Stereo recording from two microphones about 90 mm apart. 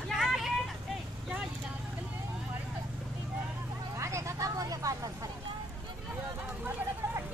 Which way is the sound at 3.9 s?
35° right (ahead or behind).